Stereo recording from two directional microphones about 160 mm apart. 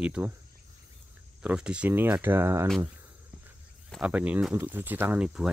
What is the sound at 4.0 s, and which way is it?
Speech, 10° right (ahead or behind).